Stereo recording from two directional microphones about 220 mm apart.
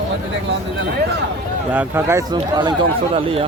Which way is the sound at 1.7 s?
10° right (ahead or behind).